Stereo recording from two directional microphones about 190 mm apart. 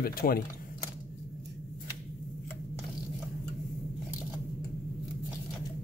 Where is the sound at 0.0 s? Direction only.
50° left (ahead or behind).